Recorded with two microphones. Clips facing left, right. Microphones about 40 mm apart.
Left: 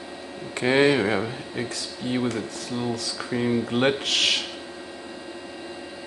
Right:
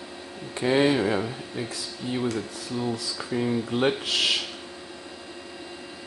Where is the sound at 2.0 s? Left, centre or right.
Left.